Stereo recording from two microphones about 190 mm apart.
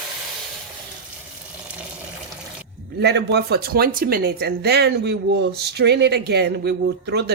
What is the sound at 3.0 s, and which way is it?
Speech, 60° right (ahead or behind).